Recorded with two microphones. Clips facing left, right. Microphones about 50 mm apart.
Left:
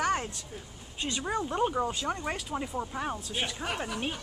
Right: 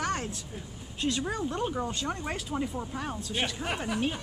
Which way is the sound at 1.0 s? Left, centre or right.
Centre.